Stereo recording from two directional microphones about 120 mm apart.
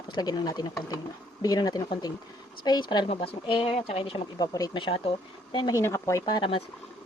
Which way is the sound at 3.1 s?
55° left (ahead or behind).